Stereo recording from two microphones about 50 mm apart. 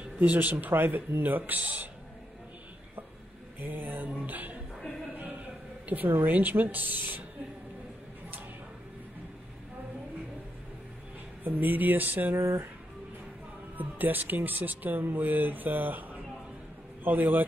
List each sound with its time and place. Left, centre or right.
0.0 s speech: right
3.5 s speech: right
5.9 s speech: right
11.4 s speech: right
12.4 s speech: right
13.7 s speech: right